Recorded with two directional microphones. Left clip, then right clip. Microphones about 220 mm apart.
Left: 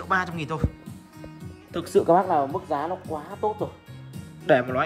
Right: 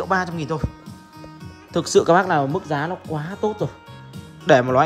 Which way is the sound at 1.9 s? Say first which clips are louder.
Right 4 dB; 40° left (ahead or behind).